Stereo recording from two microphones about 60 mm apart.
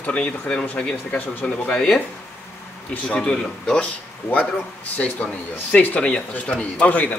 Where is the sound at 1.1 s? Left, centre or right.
Left.